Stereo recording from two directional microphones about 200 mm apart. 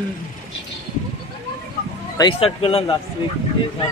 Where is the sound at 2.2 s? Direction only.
25° left (ahead or behind).